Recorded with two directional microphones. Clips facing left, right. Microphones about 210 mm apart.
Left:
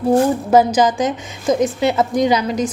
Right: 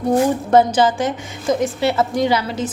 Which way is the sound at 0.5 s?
10° left (ahead or behind).